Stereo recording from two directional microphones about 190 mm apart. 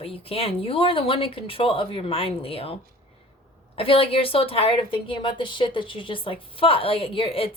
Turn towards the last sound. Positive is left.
turn(degrees=30)  # may be behind; listen again after turning